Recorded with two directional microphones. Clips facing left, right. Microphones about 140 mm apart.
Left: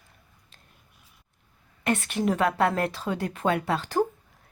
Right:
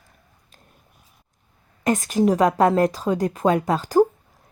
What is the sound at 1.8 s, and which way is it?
A woman's voice, 40° right (ahead or behind).